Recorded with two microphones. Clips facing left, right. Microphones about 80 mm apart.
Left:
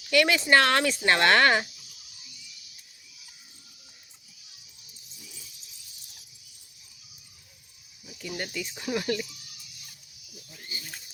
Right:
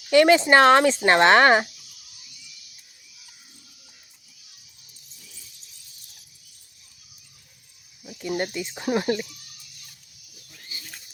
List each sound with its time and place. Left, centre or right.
0.1 s speech: right
8.0 s speech: right